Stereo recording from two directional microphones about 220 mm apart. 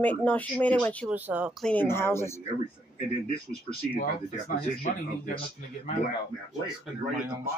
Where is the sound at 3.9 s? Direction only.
35° left (ahead or behind).